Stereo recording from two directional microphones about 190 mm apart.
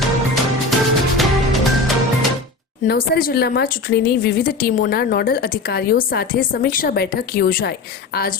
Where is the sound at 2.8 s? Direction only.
50° left (ahead or behind).